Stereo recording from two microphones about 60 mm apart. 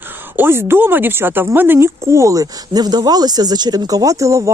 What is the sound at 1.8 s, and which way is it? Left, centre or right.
Speech, right.